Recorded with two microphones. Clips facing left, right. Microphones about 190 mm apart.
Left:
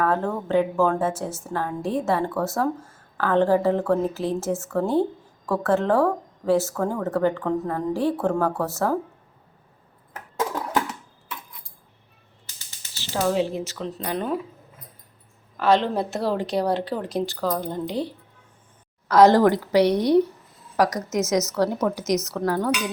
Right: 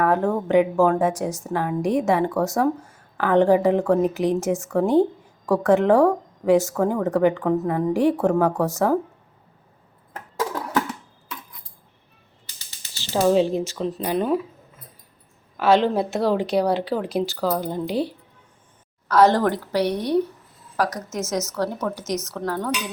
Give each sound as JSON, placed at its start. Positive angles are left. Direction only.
{"t": 0.0, "sound": "speech", "side_deg": -15}
{"t": 13.2, "sound": "speech", "side_deg": -20}
{"t": 14.0, "sound": "speech", "side_deg": -10}
{"t": 15.5, "sound": "speech", "side_deg": -5}
{"t": 19.0, "sound": "a woman's voice", "side_deg": 15}